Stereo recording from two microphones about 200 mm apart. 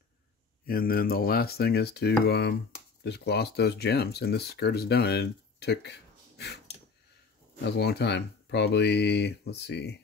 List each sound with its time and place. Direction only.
0.7 s speech: 50° left (ahead or behind)
7.6 s speech: 55° left (ahead or behind)